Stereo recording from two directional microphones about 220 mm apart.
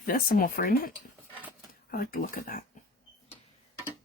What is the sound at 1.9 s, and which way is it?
Speech, 40° left (ahead or behind).